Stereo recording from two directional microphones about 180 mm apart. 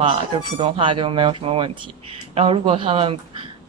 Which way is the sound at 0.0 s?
30° right (ahead or behind).